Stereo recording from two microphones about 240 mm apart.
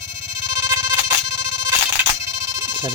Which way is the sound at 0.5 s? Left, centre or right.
Centre.